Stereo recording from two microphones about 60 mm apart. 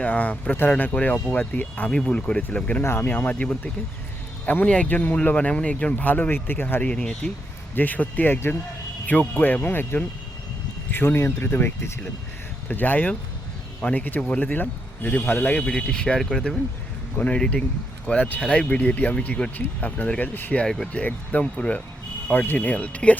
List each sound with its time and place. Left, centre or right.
0.0 s speech: left
1.9 s speech: centre
2.8 s speech: left
3.1 s speech: left
6.8 s speech: centre
7.8 s speech: left
9.4 s speech: left
12.6 s speech: left
15.6 s speech: centre; by 20.6 s left
20.7 s speech: centre
20.9 s speech: left